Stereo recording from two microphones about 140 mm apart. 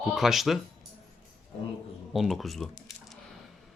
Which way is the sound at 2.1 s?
Centre (ahead or behind).